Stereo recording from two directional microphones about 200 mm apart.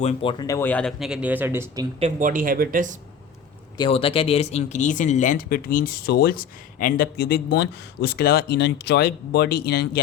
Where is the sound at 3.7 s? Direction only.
25° left (ahead or behind).